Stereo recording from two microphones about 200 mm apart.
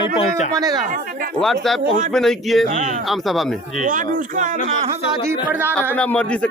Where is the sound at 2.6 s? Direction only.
40° right (ahead or behind).